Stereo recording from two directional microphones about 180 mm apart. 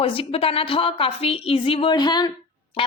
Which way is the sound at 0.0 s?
30° left (ahead or behind).